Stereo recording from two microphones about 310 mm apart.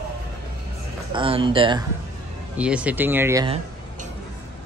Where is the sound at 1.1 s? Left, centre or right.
Centre.